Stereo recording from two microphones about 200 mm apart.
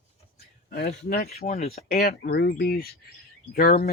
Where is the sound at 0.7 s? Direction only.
50° left (ahead or behind).